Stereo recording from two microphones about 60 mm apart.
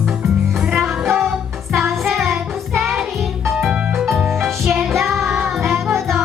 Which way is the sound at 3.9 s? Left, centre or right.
Centre.